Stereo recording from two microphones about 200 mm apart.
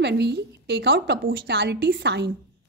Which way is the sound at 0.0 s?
55° right (ahead or behind).